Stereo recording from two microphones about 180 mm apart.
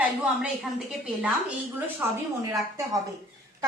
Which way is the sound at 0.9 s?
Centre (ahead or behind).